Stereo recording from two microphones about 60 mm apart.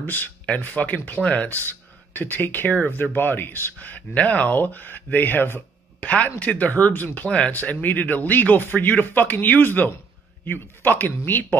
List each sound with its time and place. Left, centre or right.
0.0 s speech: left
3.7 s speech: left
6.0 s speech: left
7.2 s speech: centre